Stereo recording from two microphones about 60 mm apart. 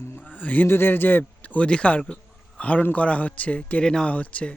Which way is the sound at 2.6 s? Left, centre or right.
Left.